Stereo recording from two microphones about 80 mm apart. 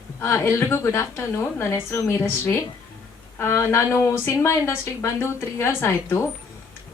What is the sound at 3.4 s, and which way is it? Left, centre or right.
A woman's voice, left.